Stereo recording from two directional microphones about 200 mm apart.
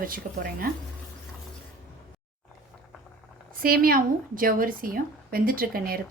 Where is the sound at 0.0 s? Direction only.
45° right (ahead or behind).